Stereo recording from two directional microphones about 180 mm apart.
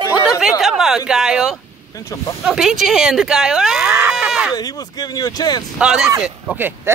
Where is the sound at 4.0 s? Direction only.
5° right (ahead or behind).